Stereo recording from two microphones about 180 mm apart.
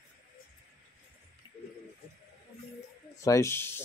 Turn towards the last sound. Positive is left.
turn(degrees=15)  # may be behind; listen again after turning